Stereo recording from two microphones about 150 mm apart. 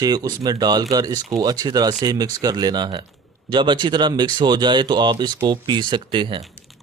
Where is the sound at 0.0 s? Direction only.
25° right (ahead or behind).